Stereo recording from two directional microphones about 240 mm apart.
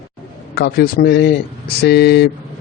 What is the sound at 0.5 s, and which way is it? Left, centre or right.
A man's voice, left.